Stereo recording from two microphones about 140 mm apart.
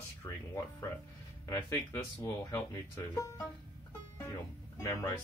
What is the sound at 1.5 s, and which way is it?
Speech, 20° left (ahead or behind).